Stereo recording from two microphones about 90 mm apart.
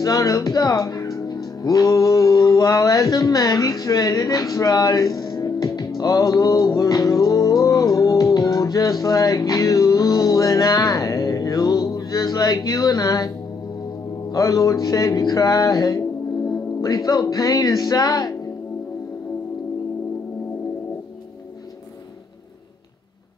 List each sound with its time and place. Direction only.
0.0 s speech: 45° left (ahead or behind)
14.3 s speech: 40° left (ahead or behind)
16.4 s music: 40° left (ahead or behind)